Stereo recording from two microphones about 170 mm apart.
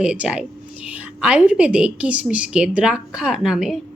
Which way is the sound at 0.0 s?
5° right (ahead or behind).